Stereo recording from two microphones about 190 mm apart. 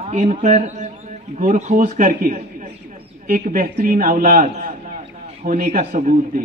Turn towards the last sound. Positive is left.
turn(degrees=-45)  # may be behind; listen again after turning